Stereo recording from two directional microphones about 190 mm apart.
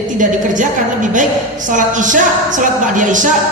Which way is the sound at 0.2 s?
40° right (ahead or behind).